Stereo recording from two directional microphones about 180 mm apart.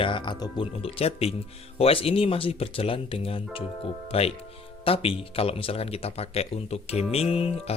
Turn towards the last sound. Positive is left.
turn(degrees=30)  # may be behind; listen again after turning